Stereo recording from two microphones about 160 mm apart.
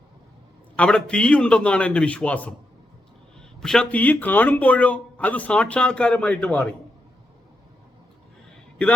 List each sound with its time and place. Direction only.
0.8 s speech: 5° left (ahead or behind)
3.6 s speech: 5° left (ahead or behind)